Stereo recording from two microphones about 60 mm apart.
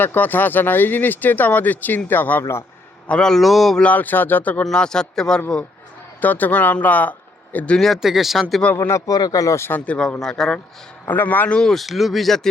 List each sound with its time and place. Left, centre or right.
0.0 s speech: left
2.4 s a man's voice: left
3.1 s speech: centre
3.9 s speech: left
4.7 s speech: centre
6.2 s speech: left
7.9 s speech: centre
8.9 s a man's voice: left
9.6 s speech: left
9.8 s speech: left
10.2 s speech: centre
11.1 s speech: left
11.6 s speech: centre